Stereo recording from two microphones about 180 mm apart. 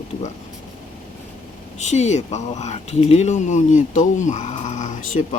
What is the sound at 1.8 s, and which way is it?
Speech, 40° left (ahead or behind).